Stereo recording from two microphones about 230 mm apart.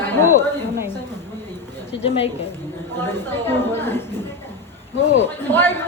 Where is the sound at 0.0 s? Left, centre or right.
Centre.